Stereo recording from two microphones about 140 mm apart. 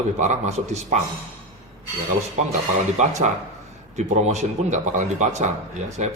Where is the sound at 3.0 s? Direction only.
55° right (ahead or behind).